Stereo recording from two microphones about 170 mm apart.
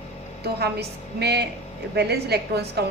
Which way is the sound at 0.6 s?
75° right (ahead or behind).